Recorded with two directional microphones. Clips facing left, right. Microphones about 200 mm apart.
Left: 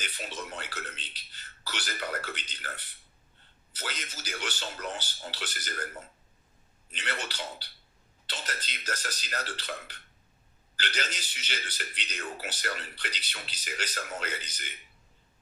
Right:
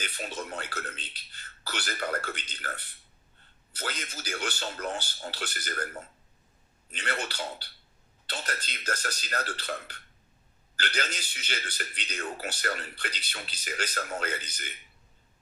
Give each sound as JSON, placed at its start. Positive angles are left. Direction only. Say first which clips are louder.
{"t": 0.0, "sound": "speech", "louder": "right 3 dB", "side_deg": -50}
{"t": 6.9, "sound": "speech", "louder": "right 3 dB", "side_deg": -50}